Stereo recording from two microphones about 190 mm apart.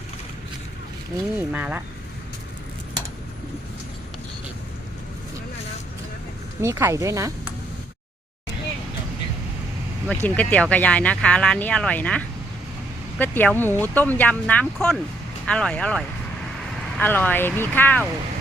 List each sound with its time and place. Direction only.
1.4 s speech: 10° right (ahead or behind)
6.6 s speech: 15° right (ahead or behind)
10.1 s speech: 10° left (ahead or behind)